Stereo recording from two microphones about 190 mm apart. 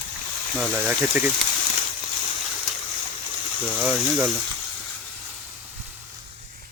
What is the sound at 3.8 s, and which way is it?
Speech, 5° right (ahead or behind).